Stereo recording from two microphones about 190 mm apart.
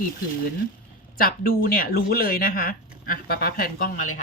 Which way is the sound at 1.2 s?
50° left (ahead or behind).